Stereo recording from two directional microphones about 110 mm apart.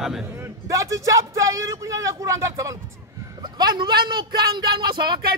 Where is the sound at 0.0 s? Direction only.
5° right (ahead or behind).